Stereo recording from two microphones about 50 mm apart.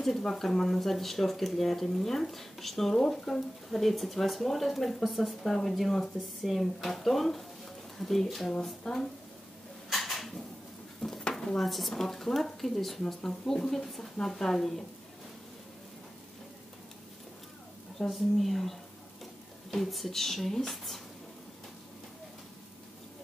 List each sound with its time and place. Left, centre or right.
0.0 s a woman's voice: centre
9.8 s a sound: centre
11.0 s a woman's voice: centre
17.9 s speech: centre